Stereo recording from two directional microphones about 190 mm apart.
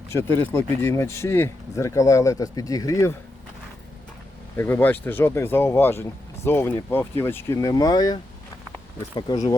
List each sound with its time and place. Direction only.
0.1 s speech: 15° left (ahead or behind)
4.5 s speech: 10° left (ahead or behind)